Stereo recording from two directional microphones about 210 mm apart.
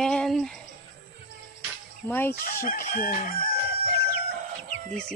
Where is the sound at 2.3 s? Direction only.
40° left (ahead or behind).